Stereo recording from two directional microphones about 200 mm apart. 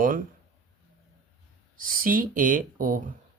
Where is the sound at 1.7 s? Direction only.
45° right (ahead or behind).